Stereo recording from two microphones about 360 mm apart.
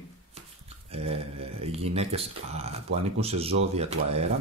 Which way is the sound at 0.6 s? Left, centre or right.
Centre.